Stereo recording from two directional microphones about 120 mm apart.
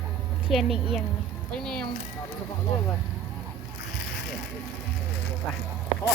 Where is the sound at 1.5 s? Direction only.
5° left (ahead or behind).